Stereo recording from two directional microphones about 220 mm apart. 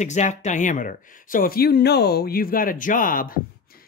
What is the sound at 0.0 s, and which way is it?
Speech, 30° left (ahead or behind).